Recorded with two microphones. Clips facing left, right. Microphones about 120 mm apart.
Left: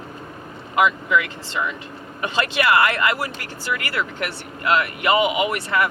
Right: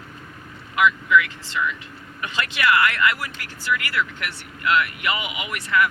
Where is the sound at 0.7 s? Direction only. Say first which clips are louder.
Even; 30° left (ahead or behind).